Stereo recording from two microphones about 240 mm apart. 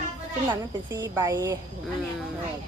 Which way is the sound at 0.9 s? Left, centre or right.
Centre.